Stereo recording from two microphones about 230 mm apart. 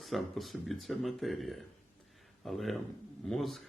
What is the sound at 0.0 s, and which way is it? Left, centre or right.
Speech, centre.